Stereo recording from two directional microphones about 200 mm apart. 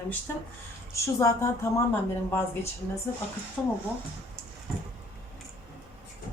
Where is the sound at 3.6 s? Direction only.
5° left (ahead or behind).